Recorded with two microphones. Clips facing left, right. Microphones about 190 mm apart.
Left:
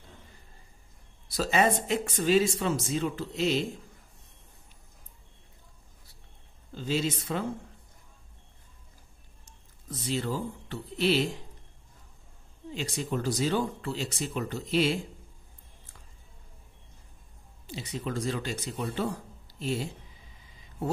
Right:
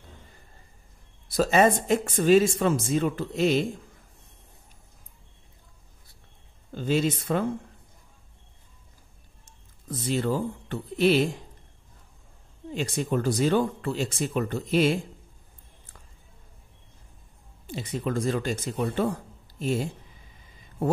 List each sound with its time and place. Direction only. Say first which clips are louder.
1.3 s speech: right 5 dB; 50° right (ahead or behind)
6.7 s speech: right 5 dB; 55° right (ahead or behind)
9.8 s speech: right 5 dB; 55° right (ahead or behind)
12.7 s speech: right 5 dB; 55° right (ahead or behind)
17.6 s speech: right 5 dB; 50° right (ahead or behind)